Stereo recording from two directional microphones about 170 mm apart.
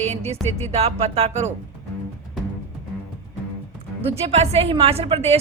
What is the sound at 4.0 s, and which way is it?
Speech, 35° right (ahead or behind).